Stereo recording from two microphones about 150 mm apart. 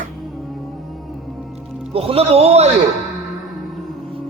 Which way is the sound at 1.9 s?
40° right (ahead or behind).